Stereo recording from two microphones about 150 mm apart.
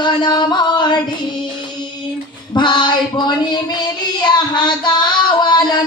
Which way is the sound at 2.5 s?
30° left (ahead or behind).